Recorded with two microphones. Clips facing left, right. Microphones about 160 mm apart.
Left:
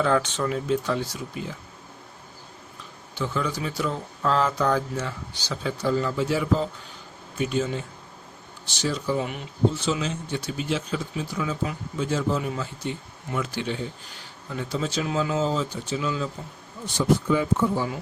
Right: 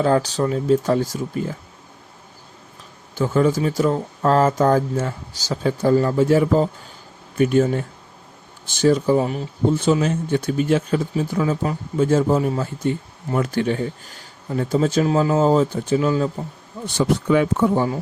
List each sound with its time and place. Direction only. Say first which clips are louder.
0.0 s speech: right 5 dB; 35° right (ahead or behind)
3.2 s speech: right 10 dB; 45° right (ahead or behind)
9.2 s speech: right 8 dB; 35° right (ahead or behind)
9.7 s speech: right 8 dB; 50° right (ahead or behind)
16.8 s speech: right 3 dB; 70° right (ahead or behind)